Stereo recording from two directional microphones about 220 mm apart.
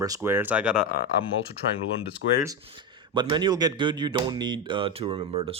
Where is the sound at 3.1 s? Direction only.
20° right (ahead or behind).